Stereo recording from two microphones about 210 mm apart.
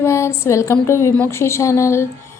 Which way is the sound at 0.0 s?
15° left (ahead or behind).